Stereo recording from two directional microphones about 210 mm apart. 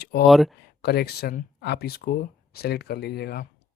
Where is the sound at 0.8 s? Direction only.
50° left (ahead or behind).